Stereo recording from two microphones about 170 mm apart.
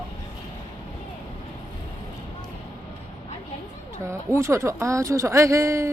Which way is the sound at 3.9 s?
15° right (ahead or behind).